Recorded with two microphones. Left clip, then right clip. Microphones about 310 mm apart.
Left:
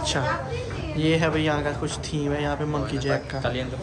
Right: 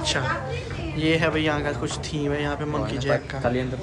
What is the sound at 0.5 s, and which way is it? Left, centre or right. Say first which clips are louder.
Speech: left 1 dB; centre.